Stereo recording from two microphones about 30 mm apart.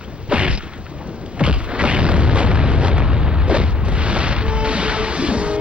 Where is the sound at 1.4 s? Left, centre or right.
Right.